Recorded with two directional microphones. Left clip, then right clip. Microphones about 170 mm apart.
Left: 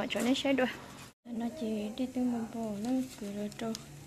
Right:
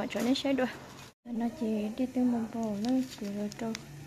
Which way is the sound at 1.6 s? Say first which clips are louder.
Right 3 dB; 15° right (ahead or behind).